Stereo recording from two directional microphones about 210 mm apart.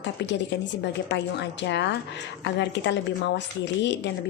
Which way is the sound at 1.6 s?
55° left (ahead or behind).